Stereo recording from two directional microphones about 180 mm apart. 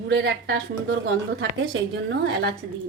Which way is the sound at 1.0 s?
85° right.